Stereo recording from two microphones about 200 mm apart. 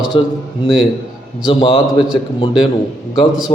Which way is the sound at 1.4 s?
25° left (ahead or behind).